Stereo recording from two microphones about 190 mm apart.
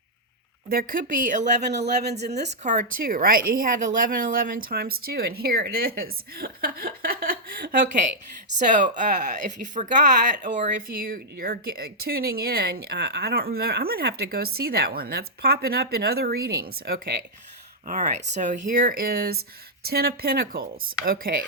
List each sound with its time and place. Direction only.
0.7 s speech: 50° right (ahead or behind)